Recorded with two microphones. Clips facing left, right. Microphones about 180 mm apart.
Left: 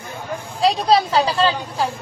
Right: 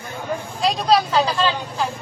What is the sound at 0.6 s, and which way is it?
Speech, 30° left (ahead or behind).